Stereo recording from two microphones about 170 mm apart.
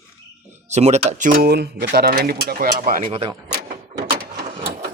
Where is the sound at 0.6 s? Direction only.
40° right (ahead or behind).